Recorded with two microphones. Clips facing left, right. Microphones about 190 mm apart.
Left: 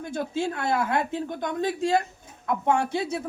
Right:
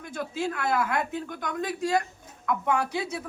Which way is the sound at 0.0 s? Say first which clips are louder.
Left 3 dB; 30° left (ahead or behind).